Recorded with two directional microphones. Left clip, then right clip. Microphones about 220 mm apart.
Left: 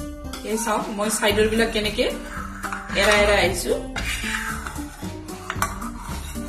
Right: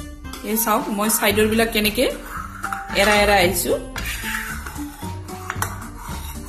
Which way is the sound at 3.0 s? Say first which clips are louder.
Right 2 dB; 45° right (ahead or behind).